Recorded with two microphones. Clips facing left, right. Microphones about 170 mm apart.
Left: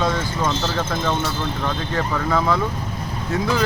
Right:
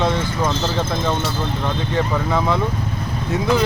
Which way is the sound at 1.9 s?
20° right (ahead or behind).